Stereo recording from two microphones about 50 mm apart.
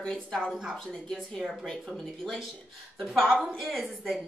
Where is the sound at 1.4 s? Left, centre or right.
Centre.